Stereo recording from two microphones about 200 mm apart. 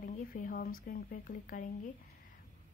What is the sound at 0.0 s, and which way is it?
A woman's voice, 45° left (ahead or behind).